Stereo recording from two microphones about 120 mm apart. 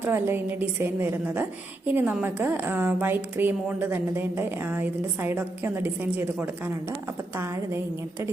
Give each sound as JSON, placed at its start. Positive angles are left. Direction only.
{"t": 0.0, "sound": "a woman's voice", "side_deg": -20}